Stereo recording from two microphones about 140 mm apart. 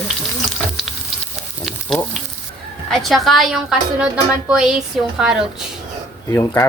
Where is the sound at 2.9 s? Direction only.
Centre (ahead or behind).